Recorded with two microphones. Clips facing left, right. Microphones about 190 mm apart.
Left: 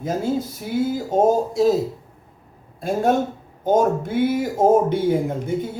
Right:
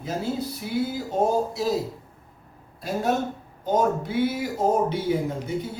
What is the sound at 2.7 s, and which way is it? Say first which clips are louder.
Speech: left 5 dB; 50° left (ahead or behind).